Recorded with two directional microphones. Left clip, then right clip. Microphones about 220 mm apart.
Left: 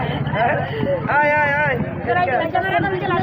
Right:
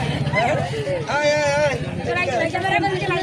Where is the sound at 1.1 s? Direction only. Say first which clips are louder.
Left 2 dB; 30° right (ahead or behind).